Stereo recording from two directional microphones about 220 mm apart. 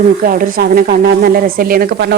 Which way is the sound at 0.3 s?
40° right (ahead or behind).